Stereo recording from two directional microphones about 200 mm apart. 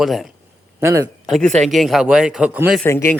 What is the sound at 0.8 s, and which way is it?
Speech, 15° right (ahead or behind).